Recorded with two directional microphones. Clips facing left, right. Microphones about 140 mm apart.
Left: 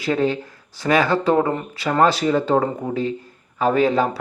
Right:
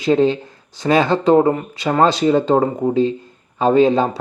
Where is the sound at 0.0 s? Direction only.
20° right (ahead or behind).